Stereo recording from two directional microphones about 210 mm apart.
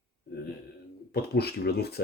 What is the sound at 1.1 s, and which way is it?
Speech, 50° left (ahead or behind).